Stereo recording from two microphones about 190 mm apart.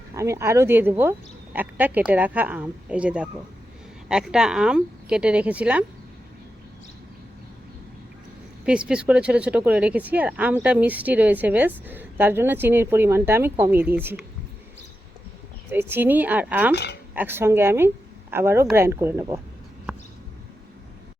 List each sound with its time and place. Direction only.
0.1 s a woman's voice: 15° right (ahead or behind)
8.6 s speech: 5° right (ahead or behind)
15.7 s speech: 10° right (ahead or behind)
16.7 s speech: 60° left (ahead or behind)
17.2 s speech: 10° right (ahead or behind)
19.9 s a sound: 5° right (ahead or behind)